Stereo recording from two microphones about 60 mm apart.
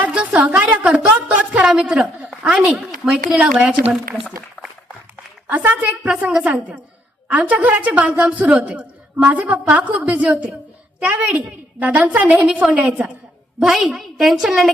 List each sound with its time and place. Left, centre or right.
0.1 s a woman's voice: centre
5.5 s a woman's voice: right
13.6 s a woman's voice: centre